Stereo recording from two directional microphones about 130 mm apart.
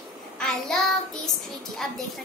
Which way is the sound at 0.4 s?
5° left (ahead or behind).